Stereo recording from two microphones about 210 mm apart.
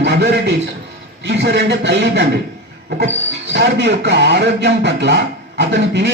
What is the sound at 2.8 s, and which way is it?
Train, 50° right (ahead or behind).